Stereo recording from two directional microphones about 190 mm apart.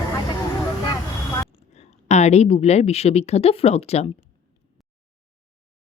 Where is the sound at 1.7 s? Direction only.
35° left (ahead or behind).